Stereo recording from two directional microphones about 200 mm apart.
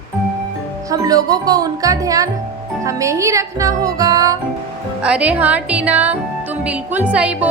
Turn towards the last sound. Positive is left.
turn(degrees=-5)  # may be behind; listen again after turning